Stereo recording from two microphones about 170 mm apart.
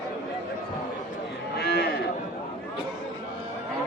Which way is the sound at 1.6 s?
70° left (ahead or behind).